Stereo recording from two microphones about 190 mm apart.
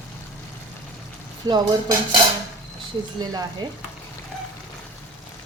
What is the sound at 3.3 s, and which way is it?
Dishes, 20° right (ahead or behind).